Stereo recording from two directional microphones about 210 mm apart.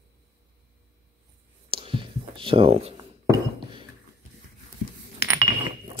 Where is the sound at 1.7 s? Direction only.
25° right (ahead or behind).